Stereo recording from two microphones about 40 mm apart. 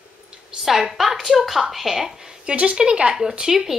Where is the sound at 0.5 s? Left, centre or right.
Centre.